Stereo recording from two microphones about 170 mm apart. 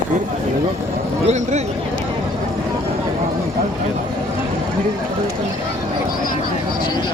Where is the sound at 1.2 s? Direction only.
40° right (ahead or behind).